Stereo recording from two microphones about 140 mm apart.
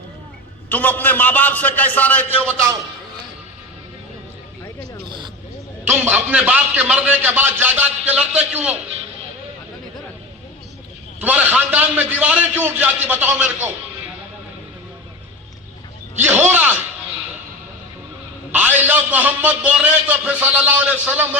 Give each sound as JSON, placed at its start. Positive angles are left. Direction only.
{"t": 0.7, "sound": "a man's voice", "side_deg": 10}
{"t": 5.0, "sound": "a sound", "side_deg": -35}
{"t": 5.8, "sound": "a man's voice", "side_deg": -15}
{"t": 11.2, "sound": "a man's voice", "side_deg": -10}
{"t": 16.2, "sound": "a man's voice", "side_deg": -10}
{"t": 18.5, "sound": "a man's voice", "side_deg": -15}